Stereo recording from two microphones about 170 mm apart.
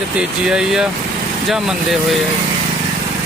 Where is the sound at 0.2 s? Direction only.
5° right (ahead or behind).